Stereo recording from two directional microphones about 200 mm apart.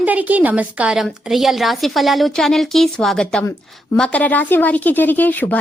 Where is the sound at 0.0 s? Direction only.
10° right (ahead or behind).